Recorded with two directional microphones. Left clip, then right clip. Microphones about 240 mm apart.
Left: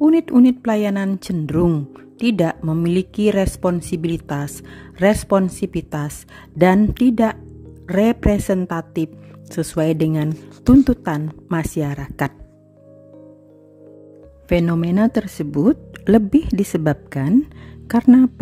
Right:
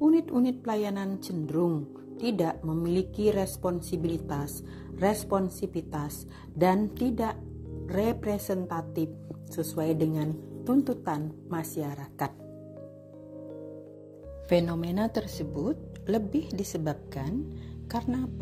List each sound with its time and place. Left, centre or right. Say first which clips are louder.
0.0 s speech: left 10 dB; left
14.5 s speech: left 8 dB; left